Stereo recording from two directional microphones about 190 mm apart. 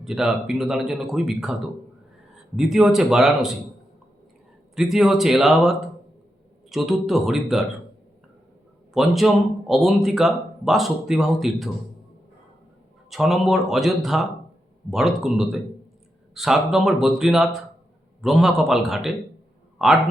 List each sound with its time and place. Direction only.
0.0 s a man's voice: centre (ahead or behind)
2.6 s a man's voice: centre (ahead or behind)
4.7 s a man's voice: centre (ahead or behind)
8.9 s a man's voice: centre (ahead or behind)
13.1 s a man's voice: centre (ahead or behind)